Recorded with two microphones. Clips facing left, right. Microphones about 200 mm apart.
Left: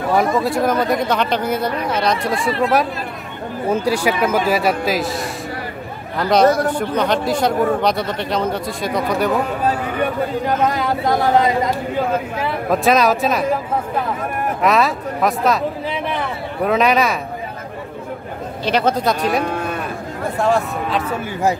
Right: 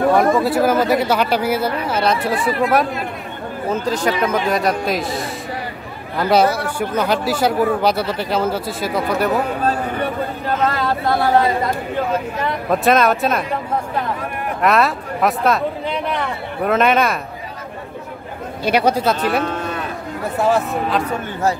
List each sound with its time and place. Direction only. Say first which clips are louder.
0.1 s a man's voice: right 2 dB; centre (ahead or behind)
3.7 s a man's voice: left 1 dB; 10° left (ahead or behind)
10.4 s speech: right 1 dB; 15° left (ahead or behind)
12.4 s a man's voice: even; 5° left (ahead or behind)
14.6 s speech: right 1 dB; centre (ahead or behind)
18.6 s a man's voice: right 1 dB; 10° right (ahead or behind)